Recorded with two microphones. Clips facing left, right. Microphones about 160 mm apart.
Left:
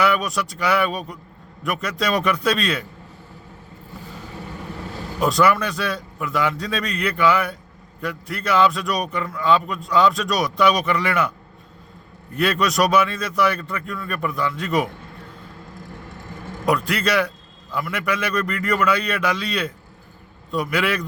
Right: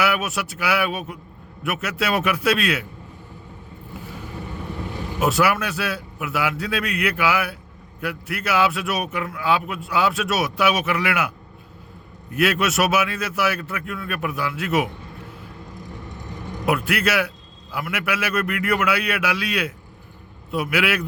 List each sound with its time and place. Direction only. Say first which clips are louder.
0.0 s a man's voice: left 2 dB; 5° right (ahead or behind)
4.9 s vehicle: right 1 dB; 20° right (ahead or behind)
5.2 s a man's voice: left 2 dB; 5° right (ahead or behind)
12.3 s a man's voice: even; 5° right (ahead or behind)
15.8 s vehicle: right 1 dB; 20° right (ahead or behind)
16.6 s a man's voice: left 1 dB; 5° right (ahead or behind)